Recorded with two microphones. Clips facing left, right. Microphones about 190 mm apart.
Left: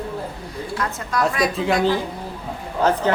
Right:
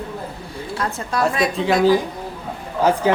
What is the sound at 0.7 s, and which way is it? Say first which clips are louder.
Speech: right 1 dB; 30° right (ahead or behind).